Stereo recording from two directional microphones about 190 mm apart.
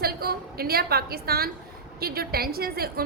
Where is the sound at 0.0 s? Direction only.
55° right (ahead or behind).